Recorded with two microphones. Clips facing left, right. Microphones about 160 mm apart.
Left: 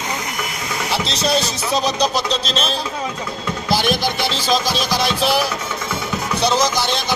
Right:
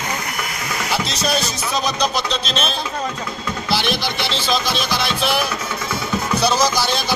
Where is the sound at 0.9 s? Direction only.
30° left (ahead or behind).